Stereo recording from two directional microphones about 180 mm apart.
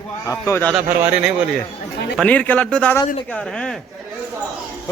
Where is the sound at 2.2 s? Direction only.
5° left (ahead or behind).